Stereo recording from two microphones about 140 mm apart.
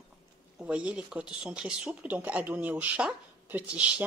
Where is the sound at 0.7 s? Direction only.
10° right (ahead or behind).